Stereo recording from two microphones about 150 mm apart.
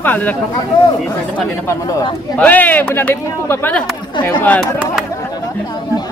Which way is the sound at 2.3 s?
10° left (ahead or behind).